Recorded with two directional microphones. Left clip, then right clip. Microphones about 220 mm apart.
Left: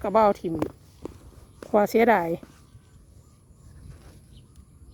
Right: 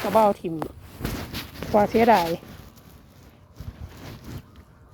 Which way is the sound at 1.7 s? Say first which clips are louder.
Right 2 dB; 30° left (ahead or behind).